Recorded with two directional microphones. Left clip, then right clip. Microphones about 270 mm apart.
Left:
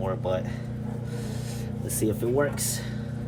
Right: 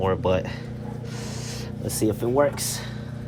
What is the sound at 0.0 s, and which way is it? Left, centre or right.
Vehicle, right.